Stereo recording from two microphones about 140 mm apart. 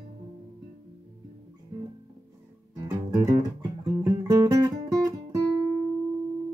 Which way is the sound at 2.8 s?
20° right (ahead or behind).